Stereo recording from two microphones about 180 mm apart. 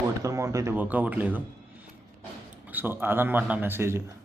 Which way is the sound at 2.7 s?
10° right (ahead or behind).